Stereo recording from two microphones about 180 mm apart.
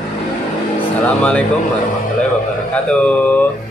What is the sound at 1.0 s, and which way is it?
Speech, 5° left (ahead or behind).